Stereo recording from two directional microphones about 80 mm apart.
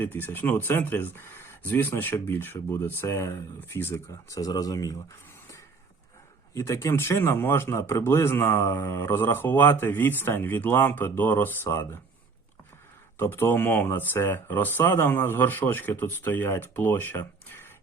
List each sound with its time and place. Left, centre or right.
0.0 s speech: left
3.2 s speech: left
3.6 s speech: left
4.3 s speech: left
6.5 s speech: left
11.7 s speech: left
13.1 s speech: left